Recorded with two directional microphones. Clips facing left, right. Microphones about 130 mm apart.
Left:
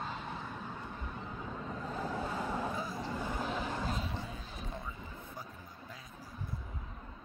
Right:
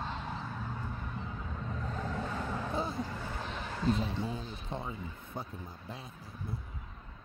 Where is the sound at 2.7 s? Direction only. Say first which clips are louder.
Right 5 dB; 30° right (ahead or behind).